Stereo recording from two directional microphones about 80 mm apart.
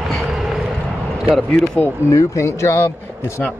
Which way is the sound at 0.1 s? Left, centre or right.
Centre.